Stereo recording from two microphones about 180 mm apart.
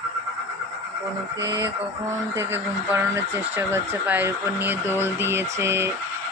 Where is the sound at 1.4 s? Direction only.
20° right (ahead or behind).